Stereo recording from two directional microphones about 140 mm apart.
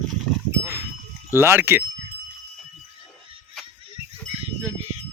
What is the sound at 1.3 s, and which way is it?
Speech, 15° right (ahead or behind).